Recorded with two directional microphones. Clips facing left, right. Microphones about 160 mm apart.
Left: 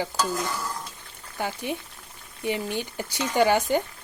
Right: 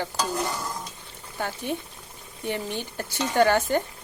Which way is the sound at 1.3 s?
15° left (ahead or behind).